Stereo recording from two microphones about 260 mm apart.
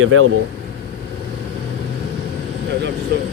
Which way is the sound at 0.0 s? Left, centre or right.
Right.